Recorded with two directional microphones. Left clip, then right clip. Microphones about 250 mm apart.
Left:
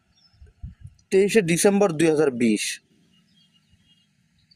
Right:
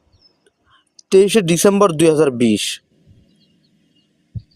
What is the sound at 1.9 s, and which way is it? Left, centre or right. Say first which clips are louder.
Speech: right 7 dB; right.